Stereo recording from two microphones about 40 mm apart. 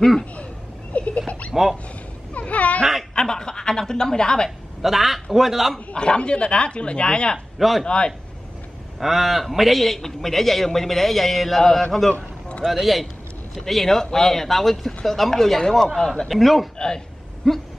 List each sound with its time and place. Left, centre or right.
0.9 s rodents: left
1.5 s speech: centre
2.3 s a sound: left
3.2 s speech: centre
4.8 s a man's voice: centre
5.9 s speech: left
7.5 s speech: centre
7.8 s speech: left
9.0 s a man's voice: centre
16.3 s a man's voice: centre
16.7 s a man's voice: centre
17.4 s a man's voice: centre